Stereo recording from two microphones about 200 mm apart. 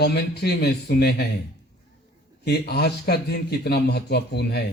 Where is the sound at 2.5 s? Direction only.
55° left (ahead or behind).